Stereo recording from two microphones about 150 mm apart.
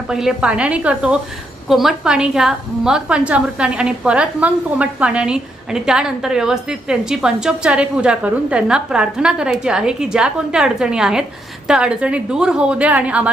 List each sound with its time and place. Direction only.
0.1 s a woman's voice: 5° right (ahead or behind)